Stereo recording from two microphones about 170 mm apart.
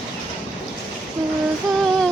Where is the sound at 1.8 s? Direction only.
5° left (ahead or behind).